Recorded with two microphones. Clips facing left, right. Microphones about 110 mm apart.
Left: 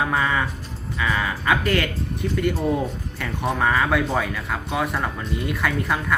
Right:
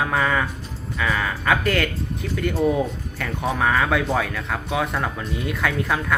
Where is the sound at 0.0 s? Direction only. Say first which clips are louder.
Right 1 dB; centre (ahead or behind).